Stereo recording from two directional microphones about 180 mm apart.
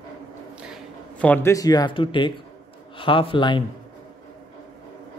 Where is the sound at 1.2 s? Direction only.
10° left (ahead or behind); by 3.6 s 25° left (ahead or behind).